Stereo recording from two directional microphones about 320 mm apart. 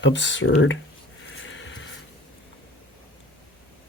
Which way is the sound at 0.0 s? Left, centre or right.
Left.